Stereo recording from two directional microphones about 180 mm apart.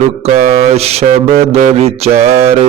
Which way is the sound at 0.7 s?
35° right (ahead or behind).